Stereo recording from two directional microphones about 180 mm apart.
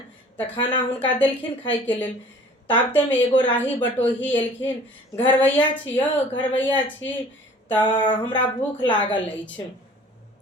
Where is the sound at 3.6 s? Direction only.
10° left (ahead or behind).